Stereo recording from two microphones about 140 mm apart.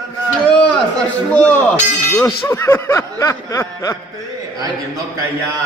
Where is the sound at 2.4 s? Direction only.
20° left (ahead or behind).